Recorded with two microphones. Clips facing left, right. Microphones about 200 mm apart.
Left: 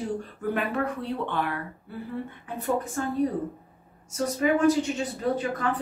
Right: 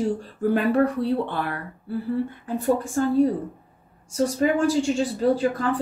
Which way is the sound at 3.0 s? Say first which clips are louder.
Right 7 dB; 35° right (ahead or behind).